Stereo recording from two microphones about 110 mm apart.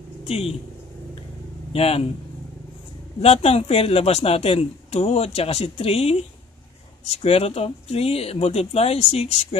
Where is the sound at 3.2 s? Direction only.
65° left (ahead or behind).